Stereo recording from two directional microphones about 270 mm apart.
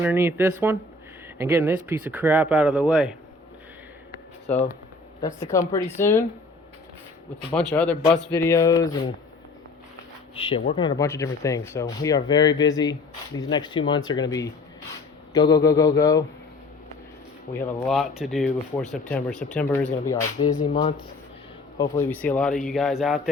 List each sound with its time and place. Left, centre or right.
0.0 s speech: centre
4.4 s speech: left
5.2 s speech: centre
7.5 s speech: centre
10.3 s speech: centre
17.6 s speech: centre
20.5 s speech: left
21.8 s speech: centre